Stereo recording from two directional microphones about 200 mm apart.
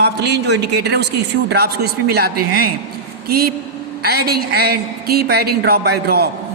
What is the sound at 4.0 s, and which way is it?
A woman's voice, 50° right (ahead or behind).